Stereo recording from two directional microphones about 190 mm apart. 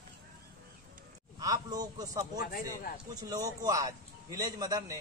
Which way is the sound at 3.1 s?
20° right (ahead or behind).